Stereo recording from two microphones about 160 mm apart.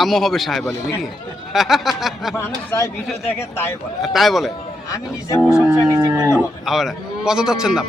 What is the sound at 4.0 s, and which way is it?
Speech, centre (ahead or behind).